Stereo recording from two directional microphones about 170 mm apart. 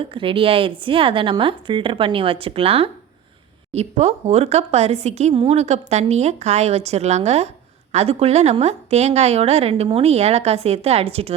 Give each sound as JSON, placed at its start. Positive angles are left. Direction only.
{"t": 0.0, "sound": "a woman's voice", "side_deg": -30}